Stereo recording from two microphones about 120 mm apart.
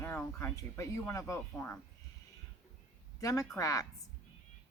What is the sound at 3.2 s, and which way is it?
Speech, 30° left (ahead or behind).